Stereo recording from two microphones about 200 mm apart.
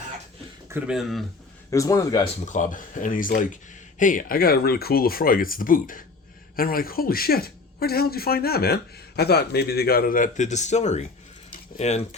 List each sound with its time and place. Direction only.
0.7 s speech: 5° right (ahead or behind)
1.7 s speech: 15° left (ahead or behind)
2.4 s speech: 40° left (ahead or behind)